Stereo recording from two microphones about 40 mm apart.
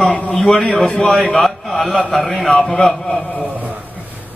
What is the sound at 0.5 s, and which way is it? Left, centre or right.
A man's voice, centre.